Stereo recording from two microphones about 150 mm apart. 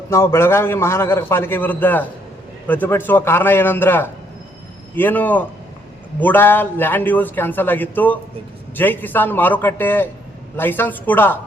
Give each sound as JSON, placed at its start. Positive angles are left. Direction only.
{"t": 0.1, "sound": "a man's voice", "side_deg": 20}